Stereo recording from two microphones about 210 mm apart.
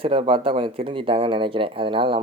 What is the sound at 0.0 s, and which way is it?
Speech, 25° right (ahead or behind).